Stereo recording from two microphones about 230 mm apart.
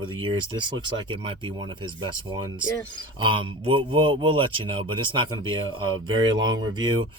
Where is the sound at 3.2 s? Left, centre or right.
Right.